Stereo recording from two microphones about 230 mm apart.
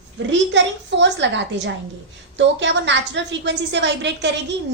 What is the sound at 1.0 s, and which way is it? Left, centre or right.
A woman's voice, right.